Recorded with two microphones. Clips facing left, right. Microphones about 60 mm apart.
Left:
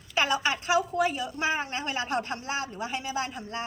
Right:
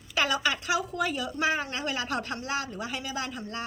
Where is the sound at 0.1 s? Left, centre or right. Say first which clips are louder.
Left 1 dB; left.